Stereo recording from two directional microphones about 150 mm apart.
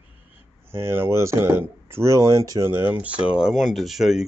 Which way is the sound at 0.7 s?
15° right (ahead or behind).